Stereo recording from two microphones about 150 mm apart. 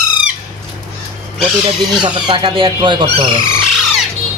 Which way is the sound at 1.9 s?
30° right (ahead or behind).